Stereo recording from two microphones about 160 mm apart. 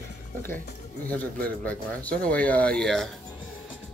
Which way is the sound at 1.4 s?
10° left (ahead or behind).